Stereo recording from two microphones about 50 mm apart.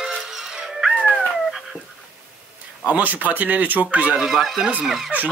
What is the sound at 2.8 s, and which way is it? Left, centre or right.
Speech, right.